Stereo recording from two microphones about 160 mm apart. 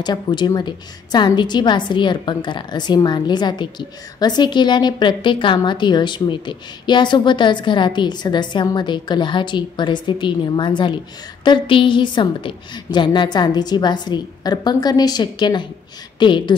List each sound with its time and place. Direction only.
0.0 s a woman's voice: 25° left (ahead or behind)